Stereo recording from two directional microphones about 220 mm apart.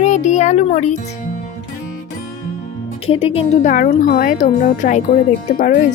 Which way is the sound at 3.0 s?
25° left (ahead or behind).